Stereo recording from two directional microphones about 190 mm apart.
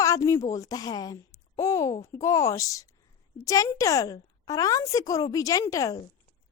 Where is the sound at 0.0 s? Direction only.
15° left (ahead or behind).